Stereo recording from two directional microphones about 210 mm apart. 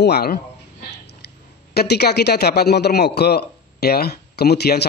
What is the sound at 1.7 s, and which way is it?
A man's voice, 50° left (ahead or behind).